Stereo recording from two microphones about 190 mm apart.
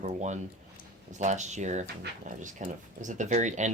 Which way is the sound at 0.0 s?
35° right (ahead or behind).